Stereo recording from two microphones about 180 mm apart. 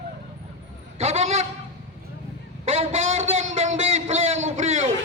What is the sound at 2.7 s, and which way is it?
A man's voice, 35° right (ahead or behind).